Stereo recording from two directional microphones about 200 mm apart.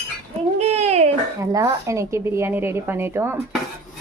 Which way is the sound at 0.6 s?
30° right (ahead or behind).